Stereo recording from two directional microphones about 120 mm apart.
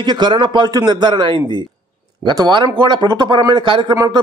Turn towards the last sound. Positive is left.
turn(degrees=-40)  # may be behind; listen again after turning